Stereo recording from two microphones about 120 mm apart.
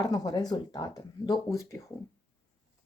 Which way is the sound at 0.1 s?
35° left (ahead or behind).